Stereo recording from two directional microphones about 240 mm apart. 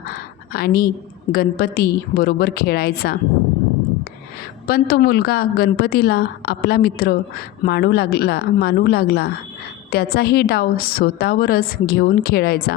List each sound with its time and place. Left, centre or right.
0.1 s a sound: left
1.3 s a woman's voice: left
4.6 s a woman's voice: left